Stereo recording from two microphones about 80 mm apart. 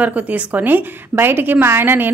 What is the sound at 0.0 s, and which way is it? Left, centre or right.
A woman's voice, centre.